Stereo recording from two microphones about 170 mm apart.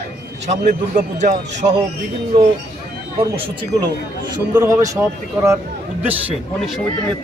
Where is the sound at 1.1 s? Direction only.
45° right (ahead or behind).